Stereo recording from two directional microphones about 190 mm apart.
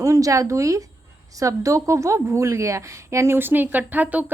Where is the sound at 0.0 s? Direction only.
15° right (ahead or behind).